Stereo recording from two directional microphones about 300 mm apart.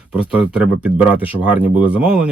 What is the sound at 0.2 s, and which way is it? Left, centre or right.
Speech, centre.